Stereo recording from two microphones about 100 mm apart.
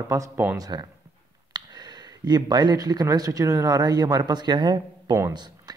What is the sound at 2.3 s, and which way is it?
Speech, 45° right (ahead or behind).